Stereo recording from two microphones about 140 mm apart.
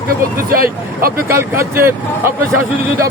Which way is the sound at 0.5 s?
90° right.